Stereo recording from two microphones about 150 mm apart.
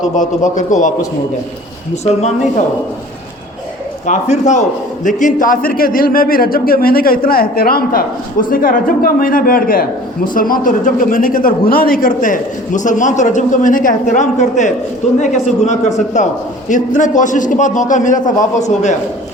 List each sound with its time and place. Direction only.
0.0 s a man's voice: 55° left (ahead or behind)
4.0 s a man's voice: 50° left (ahead or behind)
5.0 s a man's voice: 60° left (ahead or behind)